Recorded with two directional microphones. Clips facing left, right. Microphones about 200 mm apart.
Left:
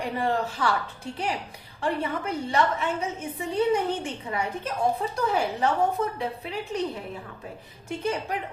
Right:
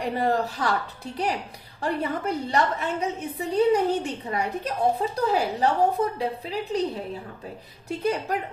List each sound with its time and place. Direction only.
0.2 s a woman's voice: 40° right (ahead or behind)
1.8 s a woman's voice: 35° right (ahead or behind)
7.9 s a woman's voice: 40° right (ahead or behind)